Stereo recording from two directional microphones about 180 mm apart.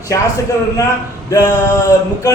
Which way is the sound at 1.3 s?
15° left (ahead or behind).